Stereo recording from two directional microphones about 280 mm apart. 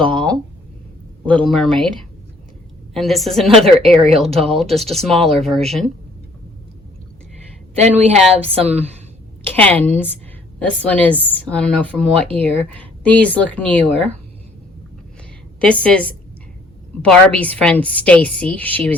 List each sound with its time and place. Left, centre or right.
0.1 s a sound: centre
1.3 s a woman's voice: centre
2.9 s a woman's voice: centre
7.8 s a woman's voice: right
9.5 s a woman's voice: centre
13.9 s a woman's voice: right
15.6 s a woman's voice: centre